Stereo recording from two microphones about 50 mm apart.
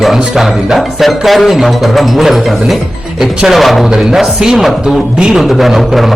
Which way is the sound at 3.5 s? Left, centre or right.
Centre.